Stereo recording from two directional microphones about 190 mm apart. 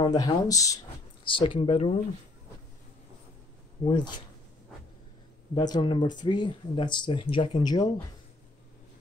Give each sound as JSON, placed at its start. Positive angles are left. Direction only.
{"t": 0.0, "sound": "speech", "side_deg": 20}
{"t": 3.8, "sound": "speech", "side_deg": 25}
{"t": 5.5, "sound": "speech", "side_deg": 25}